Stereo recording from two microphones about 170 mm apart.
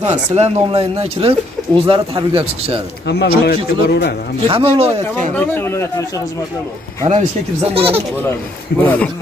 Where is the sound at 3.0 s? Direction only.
80° left.